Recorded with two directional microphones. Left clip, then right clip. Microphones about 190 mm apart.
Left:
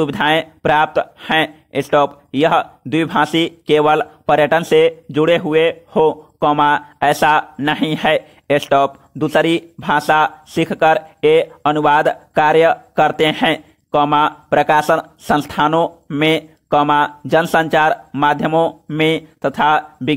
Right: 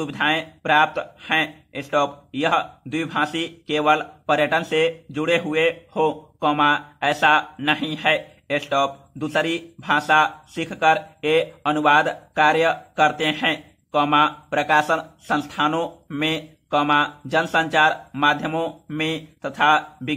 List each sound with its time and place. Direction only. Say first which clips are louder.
0.0 s speech: left 7 dB; 45° left (ahead or behind)